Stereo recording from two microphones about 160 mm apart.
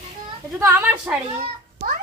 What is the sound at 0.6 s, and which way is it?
Speech, 15° right (ahead or behind).